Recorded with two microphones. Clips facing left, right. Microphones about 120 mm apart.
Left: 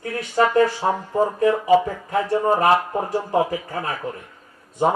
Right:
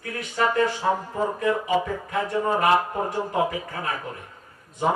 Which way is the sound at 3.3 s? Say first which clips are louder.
Left 4 dB; 35° left (ahead or behind).